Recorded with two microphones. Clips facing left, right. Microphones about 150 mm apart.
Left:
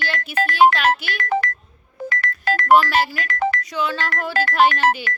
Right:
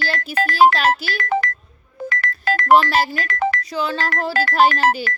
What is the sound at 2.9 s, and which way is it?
Speech, 35° right (ahead or behind).